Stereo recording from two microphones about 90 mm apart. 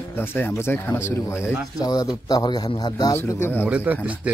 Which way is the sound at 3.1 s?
30° left (ahead or behind).